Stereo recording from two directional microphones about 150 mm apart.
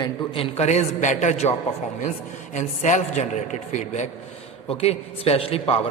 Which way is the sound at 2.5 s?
50° left (ahead or behind).